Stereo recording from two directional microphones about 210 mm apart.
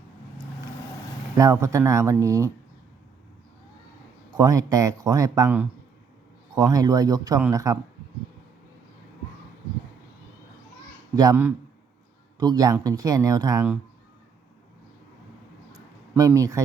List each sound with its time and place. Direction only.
1.4 s speech: 15° right (ahead or behind)
4.4 s speech: 15° right (ahead or behind)
11.1 s speech: 15° right (ahead or behind)
16.1 s speech: 15° right (ahead or behind)